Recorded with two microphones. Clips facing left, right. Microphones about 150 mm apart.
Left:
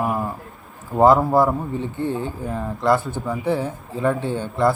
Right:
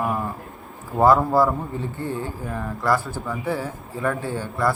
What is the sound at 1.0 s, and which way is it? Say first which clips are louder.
A man's voice: left 2 dB; 20° left (ahead or behind).